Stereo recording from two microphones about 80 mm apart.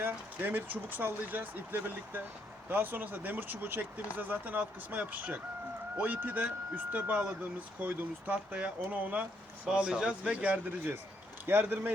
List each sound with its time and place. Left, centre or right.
0.0 s speech: right
11.4 s speech: right